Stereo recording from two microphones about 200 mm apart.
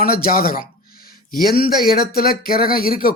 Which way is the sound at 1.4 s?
20° right (ahead or behind).